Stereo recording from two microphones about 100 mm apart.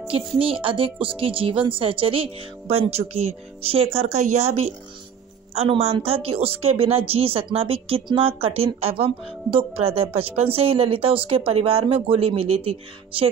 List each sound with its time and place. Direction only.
0.4 s a woman's voice: 60° right (ahead or behind)
2.7 s speech: 85° right
3.6 s speech: 75° right (ahead or behind)